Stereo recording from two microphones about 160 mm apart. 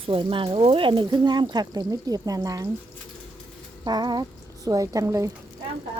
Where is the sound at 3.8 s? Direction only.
25° right (ahead or behind).